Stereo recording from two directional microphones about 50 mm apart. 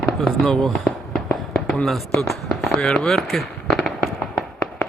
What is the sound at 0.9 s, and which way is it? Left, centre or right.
Fireworks, left.